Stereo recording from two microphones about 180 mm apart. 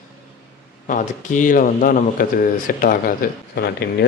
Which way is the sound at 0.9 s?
45° left (ahead or behind).